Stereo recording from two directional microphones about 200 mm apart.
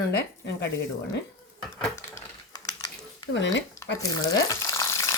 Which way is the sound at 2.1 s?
20° left (ahead or behind).